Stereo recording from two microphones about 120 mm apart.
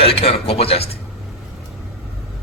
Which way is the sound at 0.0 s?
55° left (ahead or behind).